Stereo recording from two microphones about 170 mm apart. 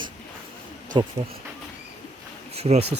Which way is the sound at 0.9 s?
25° right (ahead or behind).